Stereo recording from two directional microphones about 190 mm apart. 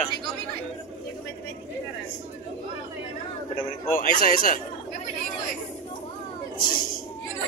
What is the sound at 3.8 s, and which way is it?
Speech, 45° left (ahead or behind).